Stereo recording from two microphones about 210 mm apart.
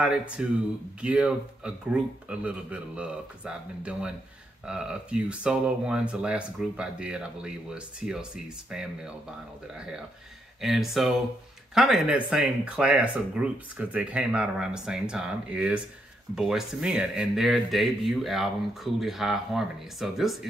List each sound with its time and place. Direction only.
0.0 s speech: 5° right (ahead or behind)
10.6 s speech: centre (ahead or behind)